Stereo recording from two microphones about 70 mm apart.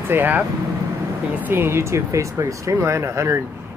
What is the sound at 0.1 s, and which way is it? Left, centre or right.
Speech, right.